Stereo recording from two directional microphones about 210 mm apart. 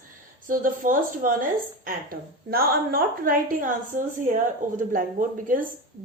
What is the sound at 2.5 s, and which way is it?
A woman's voice, 45° right (ahead or behind).